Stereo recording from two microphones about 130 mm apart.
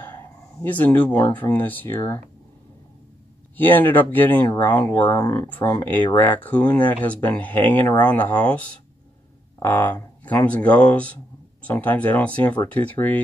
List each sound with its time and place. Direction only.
0.0 s speech: 15° left (ahead or behind)
3.5 s speech: 15° left (ahead or behind)